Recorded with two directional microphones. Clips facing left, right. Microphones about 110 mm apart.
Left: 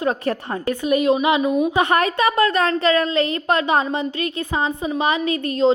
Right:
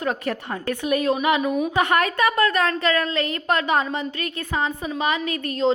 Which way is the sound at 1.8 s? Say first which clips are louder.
Left 2 dB; 25° left (ahead or behind).